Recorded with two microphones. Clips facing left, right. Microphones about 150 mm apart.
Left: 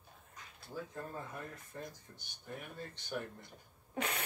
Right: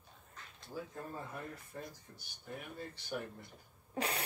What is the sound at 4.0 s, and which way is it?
Speech, 30° right (ahead or behind).